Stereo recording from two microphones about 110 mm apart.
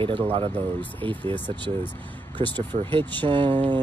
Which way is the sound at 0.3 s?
60° right (ahead or behind).